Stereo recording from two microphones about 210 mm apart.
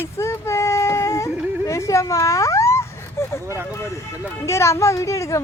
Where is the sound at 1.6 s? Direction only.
15° left (ahead or behind).